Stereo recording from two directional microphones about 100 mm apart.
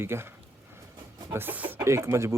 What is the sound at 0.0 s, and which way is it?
Speech, 25° right (ahead or behind).